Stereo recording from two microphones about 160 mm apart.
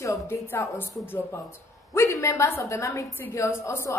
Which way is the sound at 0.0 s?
15° left (ahead or behind).